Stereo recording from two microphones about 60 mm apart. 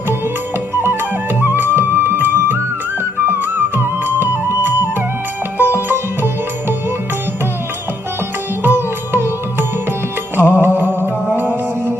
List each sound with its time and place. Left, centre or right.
0.7 s music: right
5.5 s sitar: right
8.6 s music: right